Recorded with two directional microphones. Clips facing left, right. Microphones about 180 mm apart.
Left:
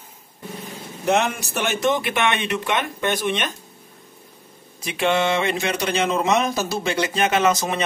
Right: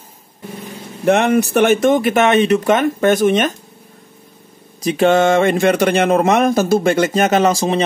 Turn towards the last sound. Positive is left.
turn(degrees=-30)  # may be behind; listen again after turning